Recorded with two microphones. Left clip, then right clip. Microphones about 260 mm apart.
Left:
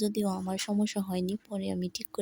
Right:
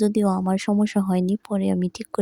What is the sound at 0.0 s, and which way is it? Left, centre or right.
Speech, right.